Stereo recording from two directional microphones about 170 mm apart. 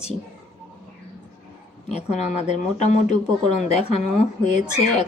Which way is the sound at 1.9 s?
40° left (ahead or behind).